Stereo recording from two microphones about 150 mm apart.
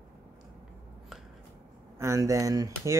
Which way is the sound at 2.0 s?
20° right (ahead or behind).